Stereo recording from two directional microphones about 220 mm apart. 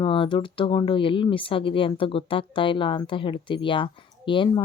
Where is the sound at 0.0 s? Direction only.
20° left (ahead or behind).